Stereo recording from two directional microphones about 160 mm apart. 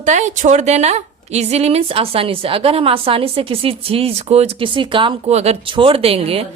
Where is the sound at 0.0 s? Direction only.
50° right (ahead or behind).